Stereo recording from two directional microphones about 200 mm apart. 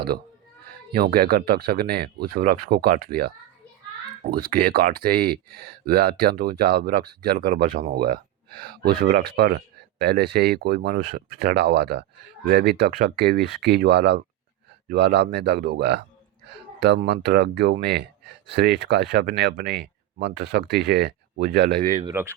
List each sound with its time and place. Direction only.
0.9 s speech: 50° right (ahead or behind)
22.1 s speech: 10° right (ahead or behind)